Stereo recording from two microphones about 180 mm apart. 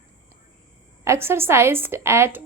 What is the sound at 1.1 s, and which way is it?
A woman's voice, 15° right (ahead or behind).